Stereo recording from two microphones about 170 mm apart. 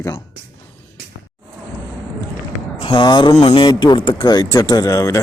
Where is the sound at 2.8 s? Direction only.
30° left (ahead or behind).